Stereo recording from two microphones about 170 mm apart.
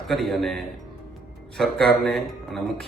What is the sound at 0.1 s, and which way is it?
Speech, centre (ahead or behind).